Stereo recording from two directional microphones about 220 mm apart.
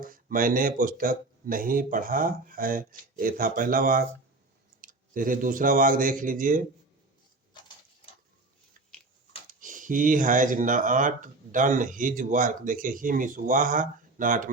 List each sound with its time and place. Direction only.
0.0 s speech: 40° right (ahead or behind)
7.6 s a sound: 20° left (ahead or behind)
9.5 s speech: 35° right (ahead or behind)